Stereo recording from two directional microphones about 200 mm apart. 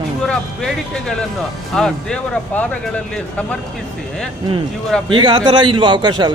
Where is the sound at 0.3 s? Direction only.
5° left (ahead or behind).